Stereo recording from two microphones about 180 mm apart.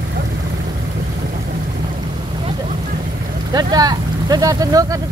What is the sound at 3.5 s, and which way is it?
Vehicle, 20° right (ahead or behind).